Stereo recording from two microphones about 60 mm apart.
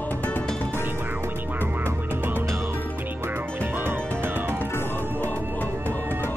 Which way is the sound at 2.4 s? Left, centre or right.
Right.